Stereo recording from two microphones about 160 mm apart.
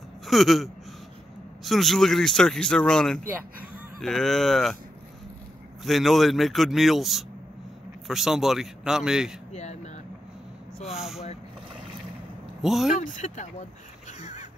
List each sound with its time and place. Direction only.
0.3 s speech: centre (ahead or behind)
5.9 s speech: centre (ahead or behind)
9.5 s speech: 45° left (ahead or behind)
11.0 s speech: centre (ahead or behind)
12.6 s speech: centre (ahead or behind)
13.0 s speech: 50° left (ahead or behind)